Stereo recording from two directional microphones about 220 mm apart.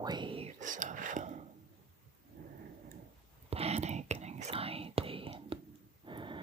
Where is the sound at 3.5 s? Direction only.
30° right (ahead or behind).